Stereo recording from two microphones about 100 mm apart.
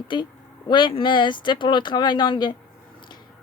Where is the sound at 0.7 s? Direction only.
55° left (ahead or behind).